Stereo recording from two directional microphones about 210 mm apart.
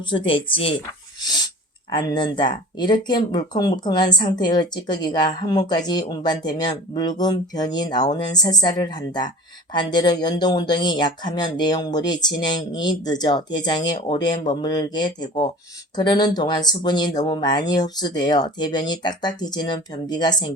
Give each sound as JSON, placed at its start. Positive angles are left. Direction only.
{"t": 0.3, "sound": "speech", "side_deg": 25}
{"t": 1.2, "sound": "a sound", "side_deg": 20}
{"t": 1.9, "sound": "speech", "side_deg": 20}